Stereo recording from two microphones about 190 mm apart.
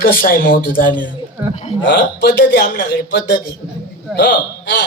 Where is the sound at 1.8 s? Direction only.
60° left (ahead or behind).